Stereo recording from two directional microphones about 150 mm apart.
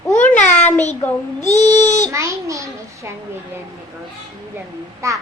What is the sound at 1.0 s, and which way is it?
Child singing, 15° left (ahead or behind).